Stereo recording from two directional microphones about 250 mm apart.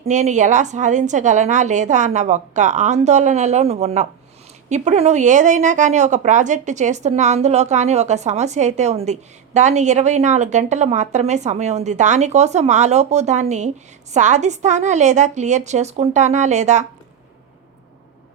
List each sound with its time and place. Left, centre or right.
0.0 s a woman's voice: right